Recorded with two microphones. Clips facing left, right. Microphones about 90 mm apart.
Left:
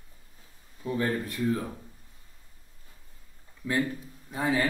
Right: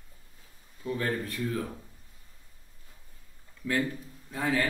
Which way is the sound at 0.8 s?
25° left (ahead or behind).